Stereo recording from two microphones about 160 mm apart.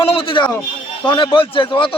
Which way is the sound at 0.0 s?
35° left (ahead or behind).